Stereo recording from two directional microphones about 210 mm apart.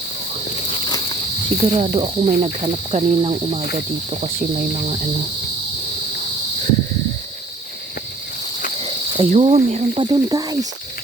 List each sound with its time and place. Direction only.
1.6 s speech: 30° right (ahead or behind)
8.8 s speech: 30° right (ahead or behind)